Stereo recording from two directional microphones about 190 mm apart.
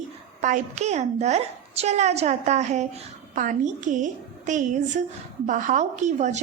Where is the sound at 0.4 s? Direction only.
40° right (ahead or behind).